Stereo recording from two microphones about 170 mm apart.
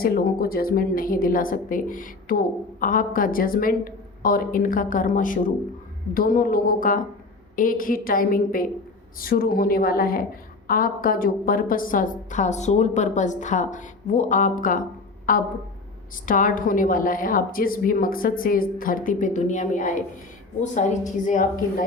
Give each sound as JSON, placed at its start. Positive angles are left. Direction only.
{"t": 0.0, "sound": "a woman's voice", "side_deg": 60}